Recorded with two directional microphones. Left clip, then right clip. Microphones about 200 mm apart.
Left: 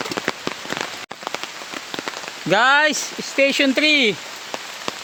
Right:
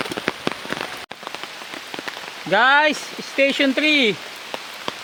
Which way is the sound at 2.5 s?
60° left (ahead or behind).